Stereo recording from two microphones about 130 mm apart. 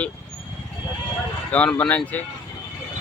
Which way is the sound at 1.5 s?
10° left (ahead or behind).